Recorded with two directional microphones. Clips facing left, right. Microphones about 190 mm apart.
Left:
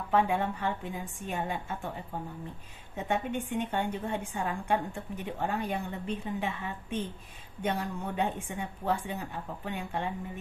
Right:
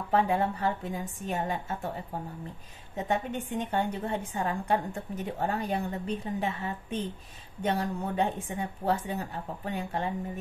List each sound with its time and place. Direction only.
0.1 s a woman's voice: 35° right (ahead or behind)
3.1 s a woman's voice: 35° right (ahead or behind)